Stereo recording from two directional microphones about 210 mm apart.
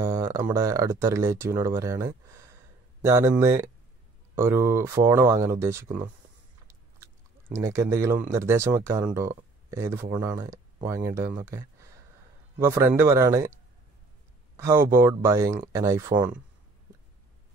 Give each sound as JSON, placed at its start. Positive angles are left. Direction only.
{"t": 0.0, "sound": "speech", "side_deg": -15}
{"t": 7.5, "sound": "speech", "side_deg": -15}
{"t": 14.6, "sound": "speech", "side_deg": -10}